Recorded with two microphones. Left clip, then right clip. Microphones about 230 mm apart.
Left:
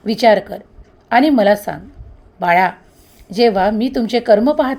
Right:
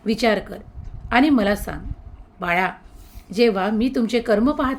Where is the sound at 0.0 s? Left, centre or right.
Centre.